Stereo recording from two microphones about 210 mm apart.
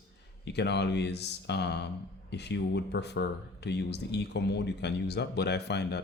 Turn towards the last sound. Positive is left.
turn(degrees=50)  # may be behind; listen again after turning